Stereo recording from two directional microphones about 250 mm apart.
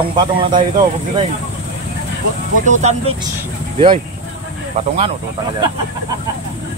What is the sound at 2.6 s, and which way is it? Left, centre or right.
Speech, right.